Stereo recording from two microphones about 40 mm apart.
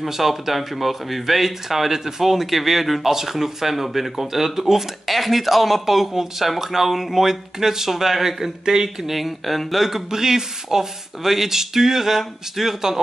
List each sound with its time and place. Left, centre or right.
0.0 s speech: centre